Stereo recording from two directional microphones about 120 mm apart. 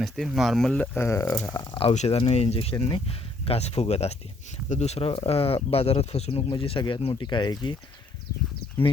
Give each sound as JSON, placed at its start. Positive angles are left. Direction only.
{"t": 0.0, "sound": "speech", "side_deg": 0}
{"t": 0.9, "sound": "speech", "side_deg": 25}
{"t": 1.8, "sound": "speech", "side_deg": 60}
{"t": 6.5, "sound": "speech", "side_deg": 45}